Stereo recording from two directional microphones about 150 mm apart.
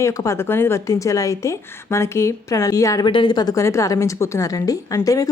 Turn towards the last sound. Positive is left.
turn(degrees=20)  # may be behind; listen again after turning